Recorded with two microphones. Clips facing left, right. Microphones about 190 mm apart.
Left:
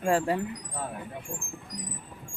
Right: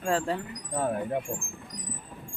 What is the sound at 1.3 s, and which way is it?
Speech, 75° right (ahead or behind).